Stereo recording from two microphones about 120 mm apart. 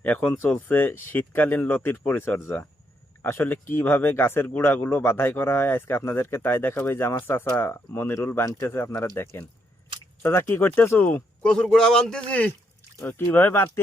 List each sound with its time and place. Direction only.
0.0 s speech: 15° left (ahead or behind)